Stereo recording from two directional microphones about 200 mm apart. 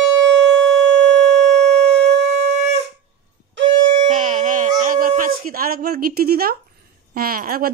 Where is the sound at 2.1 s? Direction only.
60° right (ahead or behind).